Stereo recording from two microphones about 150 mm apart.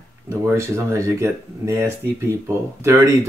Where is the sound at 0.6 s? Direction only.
20° right (ahead or behind).